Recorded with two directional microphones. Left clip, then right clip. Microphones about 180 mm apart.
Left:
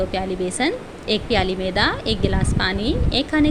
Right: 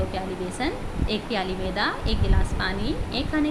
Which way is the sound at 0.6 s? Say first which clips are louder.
Left 6 dB; 45° left (ahead or behind).